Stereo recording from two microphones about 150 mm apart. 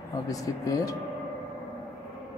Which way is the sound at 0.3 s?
20° left (ahead or behind).